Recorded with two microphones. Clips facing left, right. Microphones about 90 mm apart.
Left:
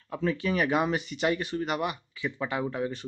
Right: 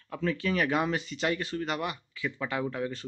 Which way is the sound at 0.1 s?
15° left (ahead or behind).